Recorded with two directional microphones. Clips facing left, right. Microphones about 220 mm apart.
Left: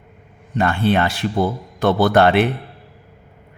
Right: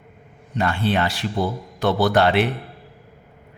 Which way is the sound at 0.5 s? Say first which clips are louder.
Left 4 dB; 55° left (ahead or behind).